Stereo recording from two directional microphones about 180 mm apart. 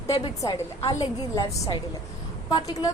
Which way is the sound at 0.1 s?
30° left (ahead or behind).